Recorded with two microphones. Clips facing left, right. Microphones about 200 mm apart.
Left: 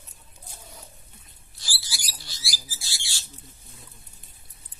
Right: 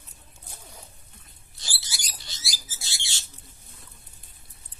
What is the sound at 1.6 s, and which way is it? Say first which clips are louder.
Rodents: left 1 dB; 25° right (ahead or behind).